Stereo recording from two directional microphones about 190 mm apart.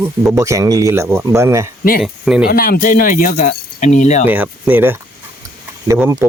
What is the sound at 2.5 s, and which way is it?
Speech, 50° left (ahead or behind).